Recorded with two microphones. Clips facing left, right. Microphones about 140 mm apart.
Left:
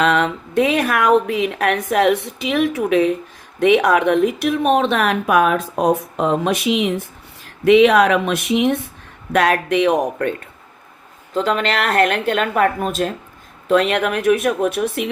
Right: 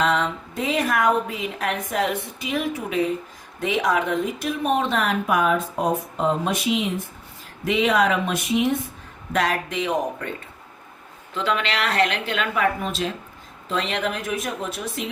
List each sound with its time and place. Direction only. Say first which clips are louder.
0.0 s speech: left 5 dB; 75° left (ahead or behind)
9.3 s speech: left 7 dB; 70° left (ahead or behind)
11.3 s a woman's voice: left 5 dB; 40° left (ahead or behind)
13.7 s speech: left 9 dB; 65° left (ahead or behind)